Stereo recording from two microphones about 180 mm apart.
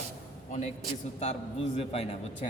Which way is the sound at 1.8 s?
35° left (ahead or behind).